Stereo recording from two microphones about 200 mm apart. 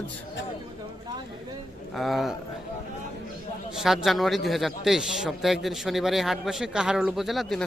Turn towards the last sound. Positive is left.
turn(degrees=0)  # may be behind; listen again after turning